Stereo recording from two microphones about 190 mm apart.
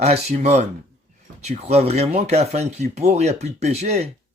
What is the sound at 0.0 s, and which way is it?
Speech, 35° right (ahead or behind).